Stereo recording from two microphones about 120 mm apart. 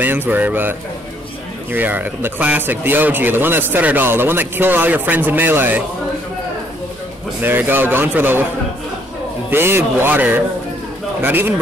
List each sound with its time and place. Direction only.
0.0 s speech: 15° right (ahead or behind)
7.4 s speech: 15° right (ahead or behind)
9.5 s speech: 20° right (ahead or behind)